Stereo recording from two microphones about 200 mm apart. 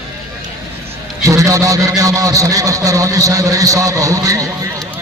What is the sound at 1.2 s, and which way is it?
A man's voice, 15° right (ahead or behind).